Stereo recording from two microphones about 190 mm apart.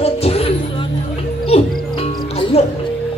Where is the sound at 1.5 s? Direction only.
30° left (ahead or behind).